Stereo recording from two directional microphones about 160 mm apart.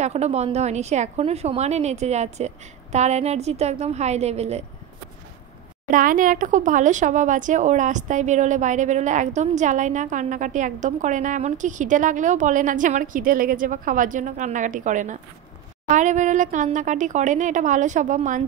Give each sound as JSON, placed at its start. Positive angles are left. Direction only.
{"t": 0.0, "sound": "speech", "side_deg": -45}
{"t": 5.9, "sound": "speech", "side_deg": -55}